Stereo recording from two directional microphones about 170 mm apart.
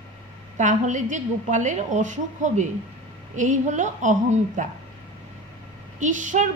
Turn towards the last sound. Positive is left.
turn(degrees=-45)  # may be behind; listen again after turning